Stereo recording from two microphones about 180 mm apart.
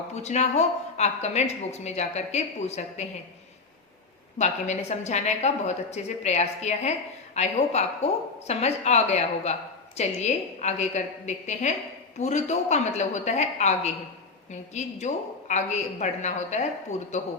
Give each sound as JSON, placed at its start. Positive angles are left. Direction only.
{"t": 0.2, "sound": "a woman's voice", "side_deg": 40}
{"t": 4.4, "sound": "a woman's voice", "side_deg": 40}